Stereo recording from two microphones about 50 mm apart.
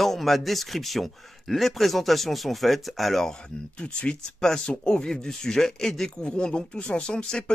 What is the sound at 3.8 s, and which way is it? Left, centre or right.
Speech, left.